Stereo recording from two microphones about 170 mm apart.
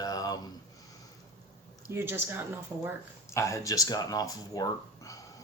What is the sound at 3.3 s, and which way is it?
Speech, 15° left (ahead or behind).